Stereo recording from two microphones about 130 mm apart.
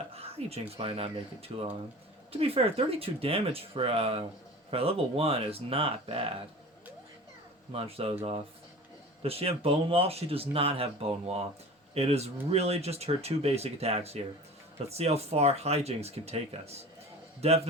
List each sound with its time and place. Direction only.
0.1 s speech: 50° right (ahead or behind)
7.7 s speech: 45° right (ahead or behind)
11.9 s speech: 55° right (ahead or behind)